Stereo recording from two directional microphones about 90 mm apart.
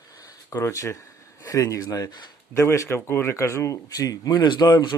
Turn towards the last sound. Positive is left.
turn(degrees=50)  # may be behind; listen again after turning